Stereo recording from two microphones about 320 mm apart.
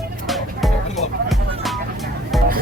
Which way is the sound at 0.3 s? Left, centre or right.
Centre.